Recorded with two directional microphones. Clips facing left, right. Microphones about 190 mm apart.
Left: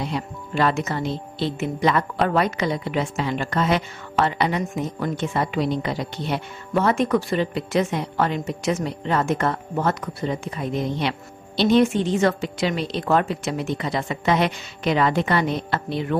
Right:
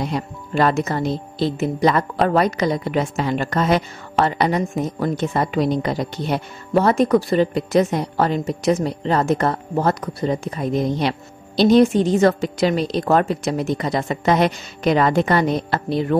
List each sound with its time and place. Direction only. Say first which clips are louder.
0.0 s speech: right 3 dB; 45° right (ahead or behind)